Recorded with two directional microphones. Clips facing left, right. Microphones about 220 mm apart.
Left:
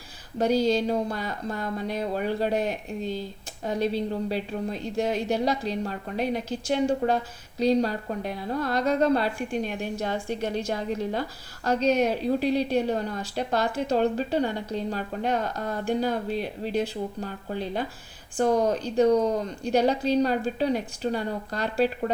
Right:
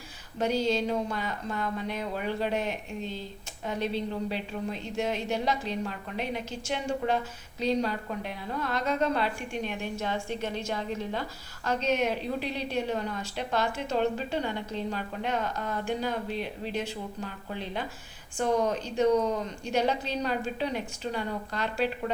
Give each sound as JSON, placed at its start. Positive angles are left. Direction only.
{"t": 0.3, "sound": "a woman's voice", "side_deg": 35}